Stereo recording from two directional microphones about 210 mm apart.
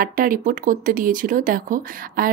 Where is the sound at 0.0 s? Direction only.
40° right (ahead or behind).